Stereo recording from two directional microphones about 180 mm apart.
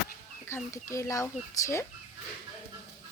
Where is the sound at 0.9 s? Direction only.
15° left (ahead or behind).